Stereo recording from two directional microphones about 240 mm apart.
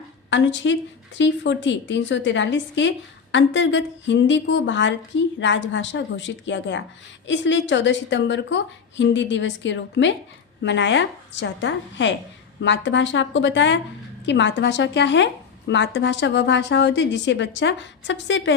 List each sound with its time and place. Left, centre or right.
0.3 s speech: left